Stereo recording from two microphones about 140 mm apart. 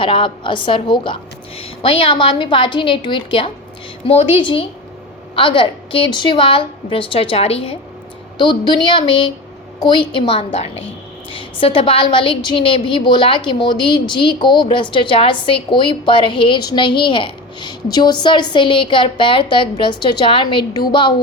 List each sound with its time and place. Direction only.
0.0 s a woman's voice: 35° left (ahead or behind)
8.4 s a woman's voice: 30° left (ahead or behind)